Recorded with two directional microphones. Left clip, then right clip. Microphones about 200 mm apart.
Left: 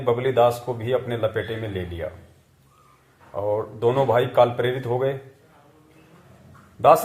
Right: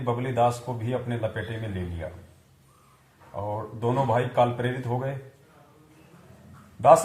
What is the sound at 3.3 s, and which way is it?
Speech, 30° left (ahead or behind).